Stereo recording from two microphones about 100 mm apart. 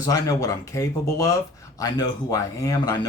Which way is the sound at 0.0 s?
35° left (ahead or behind).